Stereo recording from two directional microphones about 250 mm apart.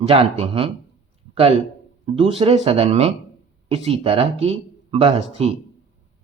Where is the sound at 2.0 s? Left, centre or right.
Right.